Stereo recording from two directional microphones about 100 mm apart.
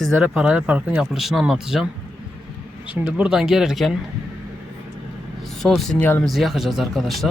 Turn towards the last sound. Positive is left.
turn(degrees=0)  # may be behind; listen again after turning